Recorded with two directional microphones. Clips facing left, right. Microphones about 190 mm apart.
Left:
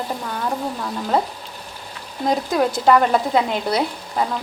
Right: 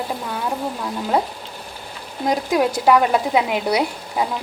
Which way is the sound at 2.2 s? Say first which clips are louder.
Even; 10° right (ahead or behind).